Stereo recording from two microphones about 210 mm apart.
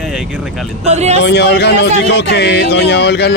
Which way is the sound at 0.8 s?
30° right (ahead or behind).